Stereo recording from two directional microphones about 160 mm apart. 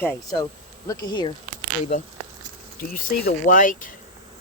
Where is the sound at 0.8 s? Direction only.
25° left (ahead or behind).